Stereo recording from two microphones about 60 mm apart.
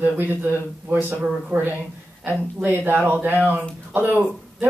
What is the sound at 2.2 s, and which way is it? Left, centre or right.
Speech, right.